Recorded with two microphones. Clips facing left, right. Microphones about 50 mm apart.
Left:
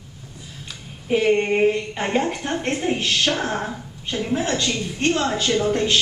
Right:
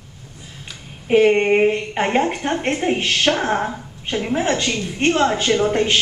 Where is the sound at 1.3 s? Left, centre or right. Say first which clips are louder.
Right 3 dB; right.